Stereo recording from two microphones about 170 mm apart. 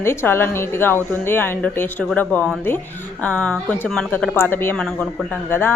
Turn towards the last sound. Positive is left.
turn(degrees=10)  # may be behind; listen again after turning